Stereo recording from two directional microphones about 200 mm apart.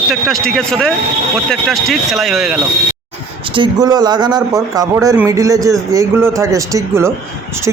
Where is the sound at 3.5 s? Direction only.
20° right (ahead or behind).